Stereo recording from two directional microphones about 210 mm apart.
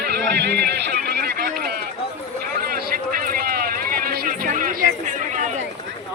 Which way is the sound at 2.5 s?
45° right (ahead or behind).